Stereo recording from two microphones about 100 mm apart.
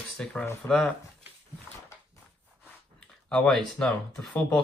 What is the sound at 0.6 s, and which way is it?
Speech, 25° left (ahead or behind).